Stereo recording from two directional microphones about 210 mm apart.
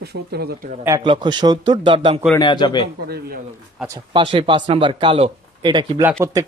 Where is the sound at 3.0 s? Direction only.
45° right (ahead or behind).